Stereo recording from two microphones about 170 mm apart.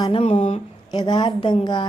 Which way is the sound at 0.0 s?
35° left (ahead or behind).